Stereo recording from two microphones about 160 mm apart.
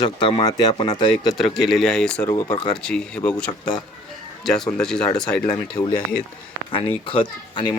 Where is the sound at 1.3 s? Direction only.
Centre (ahead or behind).